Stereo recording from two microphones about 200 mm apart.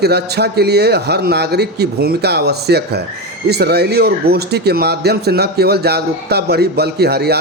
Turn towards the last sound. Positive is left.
turn(degrees=-55)  # may be behind; listen again after turning